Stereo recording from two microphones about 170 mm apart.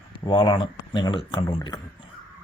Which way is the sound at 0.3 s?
25° left (ahead or behind).